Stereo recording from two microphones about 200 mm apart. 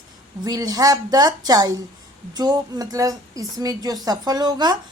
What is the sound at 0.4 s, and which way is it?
A woman's voice, 20° right (ahead or behind).